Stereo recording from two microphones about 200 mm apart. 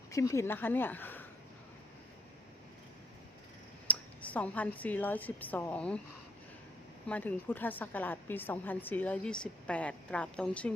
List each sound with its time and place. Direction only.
0.1 s speech: 15° left (ahead or behind)
3.8 s a woman's voice: 5° left (ahead or behind)
7.1 s a woman's voice: 10° left (ahead or behind)